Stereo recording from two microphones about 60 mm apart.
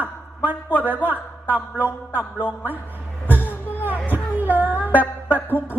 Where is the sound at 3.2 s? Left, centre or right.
Left.